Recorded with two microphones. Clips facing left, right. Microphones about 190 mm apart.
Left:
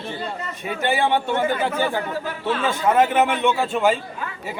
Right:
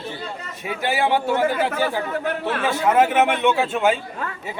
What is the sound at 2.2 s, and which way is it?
Speech, 65° right (ahead or behind).